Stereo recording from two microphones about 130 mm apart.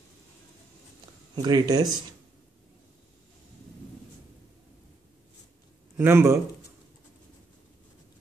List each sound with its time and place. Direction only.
1.3 s speech: 30° right (ahead or behind)
5.9 s a man's voice: 20° right (ahead or behind)